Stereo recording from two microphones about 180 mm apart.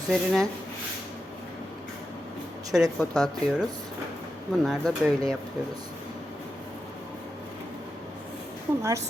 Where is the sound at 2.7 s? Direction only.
Centre (ahead or behind).